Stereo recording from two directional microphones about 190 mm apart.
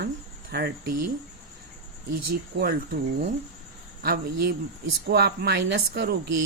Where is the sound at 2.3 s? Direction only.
55° right (ahead or behind).